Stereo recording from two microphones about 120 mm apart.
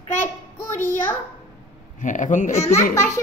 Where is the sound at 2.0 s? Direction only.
90° left.